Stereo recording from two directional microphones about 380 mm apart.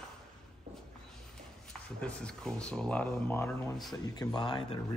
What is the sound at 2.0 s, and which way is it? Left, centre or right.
Speech, centre.